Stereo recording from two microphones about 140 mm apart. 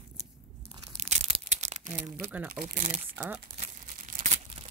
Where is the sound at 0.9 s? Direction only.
50° right (ahead or behind).